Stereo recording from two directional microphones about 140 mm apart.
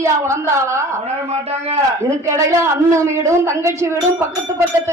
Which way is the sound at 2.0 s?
20° right (ahead or behind).